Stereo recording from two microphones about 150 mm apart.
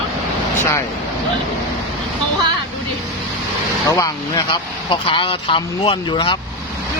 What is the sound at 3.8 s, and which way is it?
Speech, 20° left (ahead or behind).